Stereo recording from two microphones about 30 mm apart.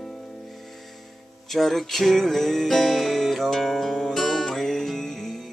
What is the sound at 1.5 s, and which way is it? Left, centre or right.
Music, centre.